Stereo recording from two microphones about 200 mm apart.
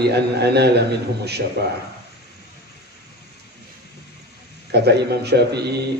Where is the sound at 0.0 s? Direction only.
55° right (ahead or behind).